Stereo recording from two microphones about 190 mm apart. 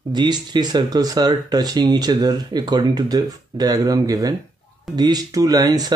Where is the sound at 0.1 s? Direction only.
20° right (ahead or behind).